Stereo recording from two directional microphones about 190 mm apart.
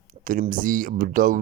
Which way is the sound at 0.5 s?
45° right (ahead or behind).